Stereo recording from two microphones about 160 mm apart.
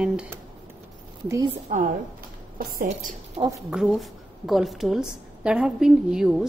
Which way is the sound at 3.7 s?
5° right (ahead or behind).